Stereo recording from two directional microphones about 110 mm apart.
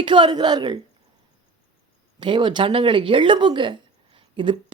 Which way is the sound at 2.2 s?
45° right (ahead or behind).